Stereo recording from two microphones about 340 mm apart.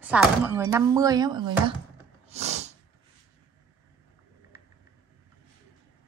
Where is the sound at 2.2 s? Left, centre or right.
Centre.